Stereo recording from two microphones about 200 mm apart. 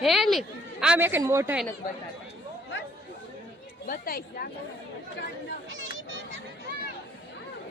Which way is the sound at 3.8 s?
45° left (ahead or behind).